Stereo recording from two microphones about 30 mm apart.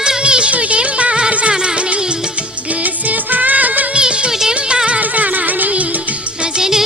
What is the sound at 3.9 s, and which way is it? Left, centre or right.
Music of bollywood, right.